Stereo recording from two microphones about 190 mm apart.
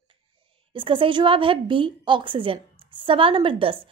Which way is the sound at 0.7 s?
25° right (ahead or behind).